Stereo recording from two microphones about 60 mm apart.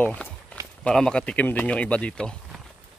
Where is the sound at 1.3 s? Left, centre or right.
Left.